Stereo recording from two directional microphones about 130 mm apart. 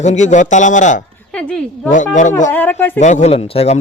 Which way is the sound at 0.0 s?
65° left (ahead or behind).